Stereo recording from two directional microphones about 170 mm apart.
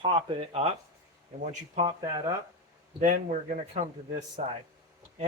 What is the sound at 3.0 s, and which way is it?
A man's voice, 55° right (ahead or behind).